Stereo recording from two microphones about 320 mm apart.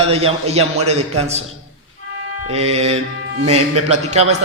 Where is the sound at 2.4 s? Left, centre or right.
Centre.